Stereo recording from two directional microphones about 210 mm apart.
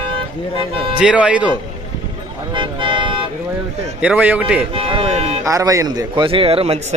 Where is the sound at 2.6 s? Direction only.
20° right (ahead or behind).